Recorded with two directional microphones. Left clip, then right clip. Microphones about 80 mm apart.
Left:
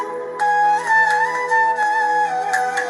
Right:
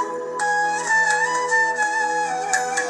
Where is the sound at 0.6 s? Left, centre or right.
Centre.